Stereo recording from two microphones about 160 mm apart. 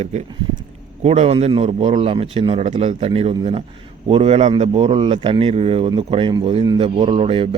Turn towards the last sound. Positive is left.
turn(degrees=-35)  # may be behind; listen again after turning